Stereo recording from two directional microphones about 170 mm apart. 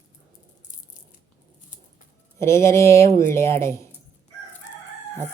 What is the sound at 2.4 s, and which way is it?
Speech, 15° left (ahead or behind).